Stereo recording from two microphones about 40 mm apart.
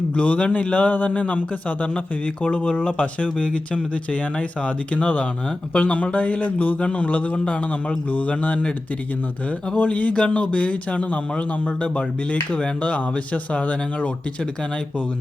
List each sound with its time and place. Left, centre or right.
0.2 s a man's voice: left
9.7 s a man's voice: left
12.8 s a man's voice: left